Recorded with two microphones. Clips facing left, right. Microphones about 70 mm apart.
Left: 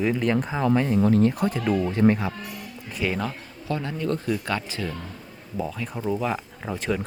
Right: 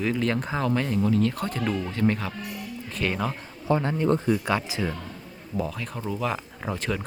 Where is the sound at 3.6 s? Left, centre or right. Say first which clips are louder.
Right 4 dB; right.